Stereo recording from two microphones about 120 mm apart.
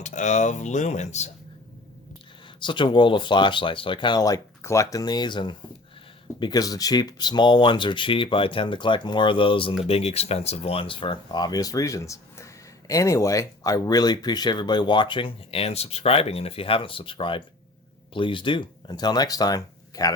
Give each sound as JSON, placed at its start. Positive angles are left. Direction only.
{"t": 0.0, "sound": "speech", "side_deg": 90}
{"t": 2.6, "sound": "speech", "side_deg": 40}
{"t": 9.8, "sound": "speech", "side_deg": 55}